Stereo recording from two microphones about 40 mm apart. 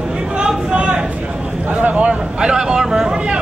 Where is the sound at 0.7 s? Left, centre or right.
Right.